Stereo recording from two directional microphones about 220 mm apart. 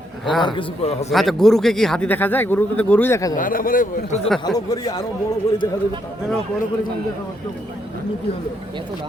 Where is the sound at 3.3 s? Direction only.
40° left (ahead or behind).